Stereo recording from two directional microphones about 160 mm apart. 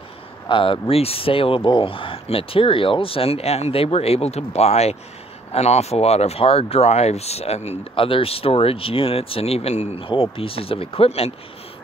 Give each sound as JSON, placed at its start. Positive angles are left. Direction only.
{"t": 0.5, "sound": "speech", "side_deg": 35}